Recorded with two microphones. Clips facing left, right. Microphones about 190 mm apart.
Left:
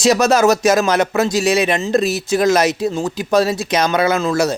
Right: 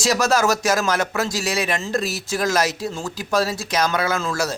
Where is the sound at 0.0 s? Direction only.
20° left (ahead or behind).